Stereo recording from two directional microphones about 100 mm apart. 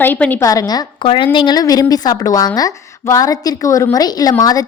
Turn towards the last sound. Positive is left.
turn(degrees=40)  # may be behind; listen again after turning